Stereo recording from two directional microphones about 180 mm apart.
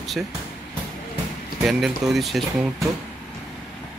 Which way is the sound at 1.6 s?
Centre (ahead or behind).